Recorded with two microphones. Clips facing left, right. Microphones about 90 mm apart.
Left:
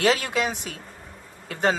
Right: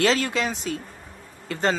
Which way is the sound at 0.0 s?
15° left (ahead or behind).